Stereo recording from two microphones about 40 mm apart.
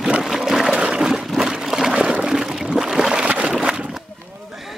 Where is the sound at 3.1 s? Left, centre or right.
Right.